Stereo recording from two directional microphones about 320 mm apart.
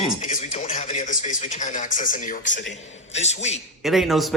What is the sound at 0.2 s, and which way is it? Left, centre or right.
A man's voice, left.